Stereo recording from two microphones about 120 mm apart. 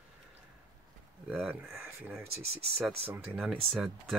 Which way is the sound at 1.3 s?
15° right (ahead or behind).